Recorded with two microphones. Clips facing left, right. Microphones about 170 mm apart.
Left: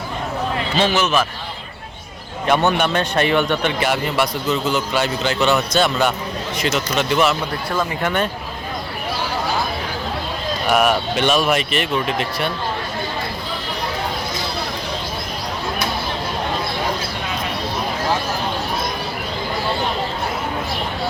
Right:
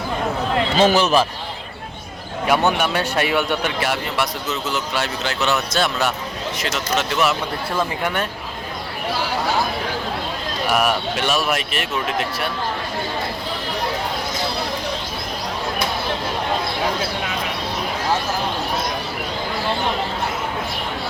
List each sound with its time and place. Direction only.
0.8 s a man's voice: 35° right (ahead or behind)
2.5 s a man's voice: 10° right (ahead or behind)
10.7 s a man's voice: 5° right (ahead or behind)